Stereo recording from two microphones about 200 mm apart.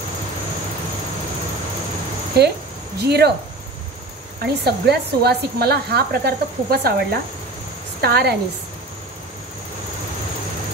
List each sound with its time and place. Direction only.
2.4 s speech: 55° right (ahead or behind)
4.4 s speech: 55° right (ahead or behind)